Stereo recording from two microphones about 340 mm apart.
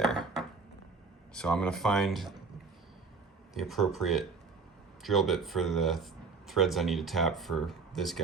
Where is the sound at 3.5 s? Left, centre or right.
Centre.